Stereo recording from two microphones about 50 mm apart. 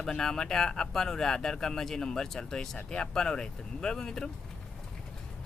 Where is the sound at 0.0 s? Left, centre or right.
Centre.